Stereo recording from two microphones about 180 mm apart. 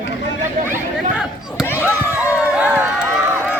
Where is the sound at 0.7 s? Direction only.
5° right (ahead or behind).